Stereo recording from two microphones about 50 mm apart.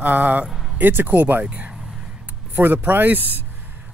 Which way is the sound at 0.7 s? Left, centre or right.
Right.